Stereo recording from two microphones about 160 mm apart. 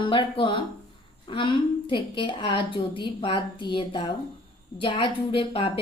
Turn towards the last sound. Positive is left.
turn(degrees=35)  # may be behind; listen again after turning